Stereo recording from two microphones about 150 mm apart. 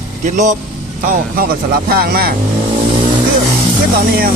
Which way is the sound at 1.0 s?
75° right (ahead or behind).